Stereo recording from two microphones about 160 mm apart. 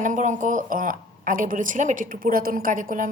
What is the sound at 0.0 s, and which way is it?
A woman's voice, 50° right (ahead or behind).